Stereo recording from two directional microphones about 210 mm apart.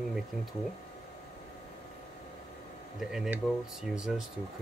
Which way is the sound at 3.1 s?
Centre (ahead or behind).